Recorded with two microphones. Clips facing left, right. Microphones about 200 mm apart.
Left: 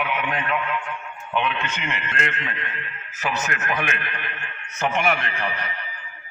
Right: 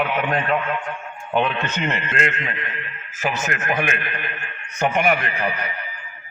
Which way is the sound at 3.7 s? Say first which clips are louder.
Right 5 dB; 45° right (ahead or behind).